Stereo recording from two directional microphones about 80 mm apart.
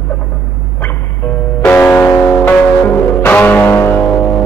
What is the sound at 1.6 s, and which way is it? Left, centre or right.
Music, centre.